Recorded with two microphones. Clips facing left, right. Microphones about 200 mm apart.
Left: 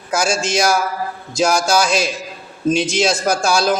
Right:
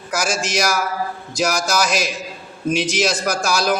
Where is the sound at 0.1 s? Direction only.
25° left (ahead or behind).